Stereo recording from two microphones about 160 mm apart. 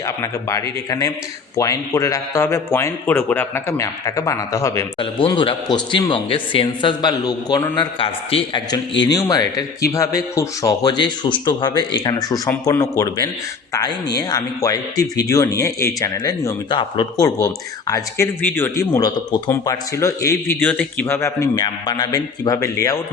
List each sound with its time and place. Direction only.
0.0 s speech: 20° left (ahead or behind)
4.9 s speech: 30° left (ahead or behind)